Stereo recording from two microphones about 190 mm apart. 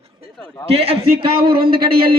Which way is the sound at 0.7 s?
30° right (ahead or behind).